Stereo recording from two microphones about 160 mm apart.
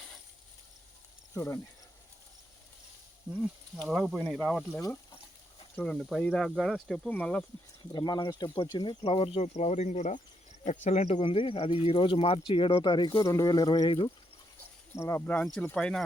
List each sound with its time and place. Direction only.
1.3 s speech: 15° left (ahead or behind)
3.8 s speech: centre (ahead or behind)
4.7 s speech: 15° left (ahead or behind)
7.9 s speech: 25° left (ahead or behind)
14.9 s speech: 15° left (ahead or behind)
15.4 s speech: 5° left (ahead or behind)